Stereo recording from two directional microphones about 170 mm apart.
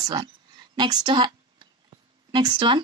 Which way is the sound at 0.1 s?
25° right (ahead or behind).